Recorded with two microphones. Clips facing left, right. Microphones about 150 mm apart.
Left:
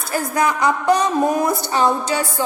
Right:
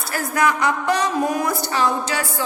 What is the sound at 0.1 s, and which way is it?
A woman's voice, 20° left (ahead or behind).